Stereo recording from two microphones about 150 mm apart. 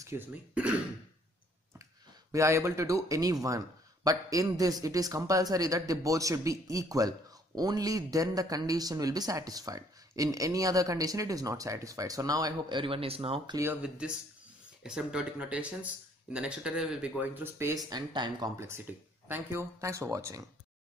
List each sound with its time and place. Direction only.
0.0 s speech: 15° right (ahead or behind)
2.3 s speech: 20° right (ahead or behind); by 13.6 s 40° right (ahead or behind)
13.8 s speech: 5° right (ahead or behind)